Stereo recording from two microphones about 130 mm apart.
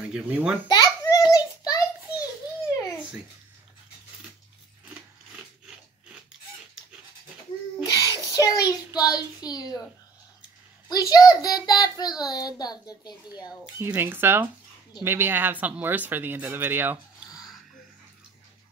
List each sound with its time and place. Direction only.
0.0 s a child's voice: 10° right (ahead or behind)
0.7 s a sound: 30° left (ahead or behind)
4.8 s a sound: 5° right (ahead or behind)
7.8 s child singing: 30° left (ahead or behind)
10.9 s a child's voice: 30° left (ahead or behind)
13.7 s speech: 20° right (ahead or behind)